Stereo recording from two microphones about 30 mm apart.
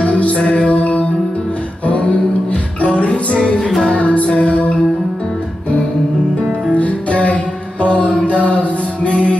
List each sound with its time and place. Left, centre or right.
0.0 s music: left
6.7 s music: left